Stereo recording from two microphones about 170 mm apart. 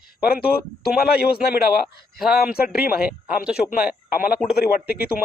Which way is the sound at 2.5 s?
65° left (ahead or behind).